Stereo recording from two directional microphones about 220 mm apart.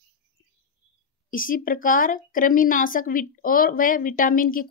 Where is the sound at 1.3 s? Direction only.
40° left (ahead or behind).